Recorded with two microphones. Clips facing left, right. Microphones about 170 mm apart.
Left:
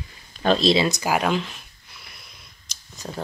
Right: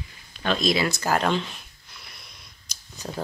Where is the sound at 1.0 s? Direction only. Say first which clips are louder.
Left 1 dB; 10° left (ahead or behind).